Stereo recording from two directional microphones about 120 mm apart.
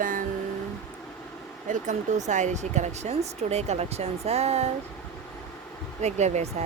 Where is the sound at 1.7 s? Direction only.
90° right; by 4.7 s 60° right (ahead or behind).